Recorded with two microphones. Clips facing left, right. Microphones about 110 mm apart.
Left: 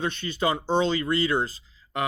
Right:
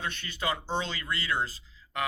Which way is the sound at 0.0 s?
25° left (ahead or behind).